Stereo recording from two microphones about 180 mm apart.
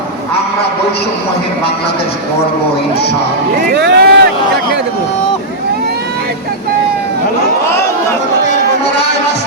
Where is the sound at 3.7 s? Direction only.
65° right (ahead or behind).